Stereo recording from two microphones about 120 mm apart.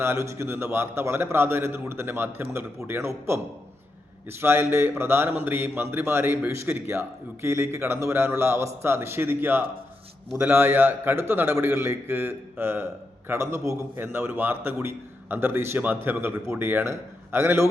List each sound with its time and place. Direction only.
0.0 s a man's voice: 25° right (ahead or behind)